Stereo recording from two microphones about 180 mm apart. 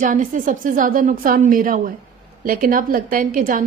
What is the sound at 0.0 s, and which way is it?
A woman's voice, 45° right (ahead or behind).